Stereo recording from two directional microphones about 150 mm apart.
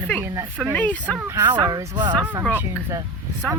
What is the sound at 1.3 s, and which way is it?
Speech, 25° right (ahead or behind).